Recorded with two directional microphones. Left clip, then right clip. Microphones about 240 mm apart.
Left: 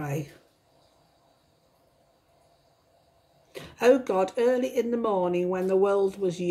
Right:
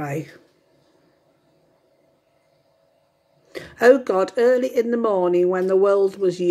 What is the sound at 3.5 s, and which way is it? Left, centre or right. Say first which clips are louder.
Speech: right 7 dB; centre.